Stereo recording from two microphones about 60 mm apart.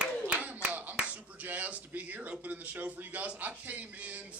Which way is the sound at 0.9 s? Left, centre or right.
Right.